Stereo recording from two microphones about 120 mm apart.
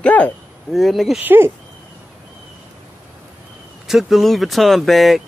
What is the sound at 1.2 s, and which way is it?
Speech, 15° right (ahead or behind).